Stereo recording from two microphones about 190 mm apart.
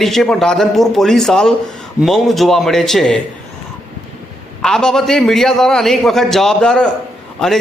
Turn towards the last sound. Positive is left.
turn(degrees=5)  # may be behind; listen again after turning